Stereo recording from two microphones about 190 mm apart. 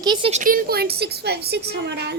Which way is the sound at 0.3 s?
40° right (ahead or behind).